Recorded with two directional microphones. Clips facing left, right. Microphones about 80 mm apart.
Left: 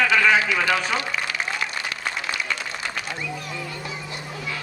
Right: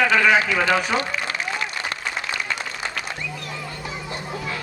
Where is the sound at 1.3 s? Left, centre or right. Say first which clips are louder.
Even; right.